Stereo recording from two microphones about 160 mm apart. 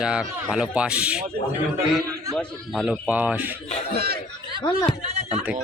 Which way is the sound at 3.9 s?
75° right (ahead or behind).